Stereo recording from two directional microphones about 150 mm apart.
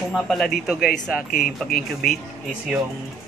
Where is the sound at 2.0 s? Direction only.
70° left (ahead or behind).